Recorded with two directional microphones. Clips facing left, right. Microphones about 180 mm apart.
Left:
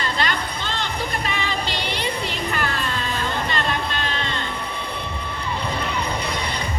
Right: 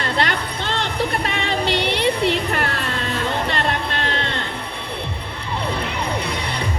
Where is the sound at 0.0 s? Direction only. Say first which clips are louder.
Right 3 dB; 70° right (ahead or behind).